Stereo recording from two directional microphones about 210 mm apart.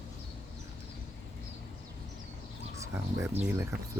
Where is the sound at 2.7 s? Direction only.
15° right (ahead or behind).